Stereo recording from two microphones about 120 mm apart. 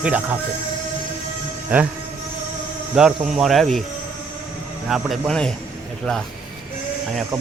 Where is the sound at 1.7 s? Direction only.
10° right (ahead or behind).